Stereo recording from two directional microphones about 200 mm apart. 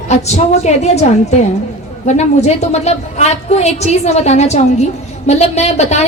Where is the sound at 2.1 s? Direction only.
35° left (ahead or behind).